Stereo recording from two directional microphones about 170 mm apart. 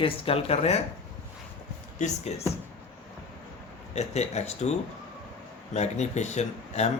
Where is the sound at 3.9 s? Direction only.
40° left (ahead or behind).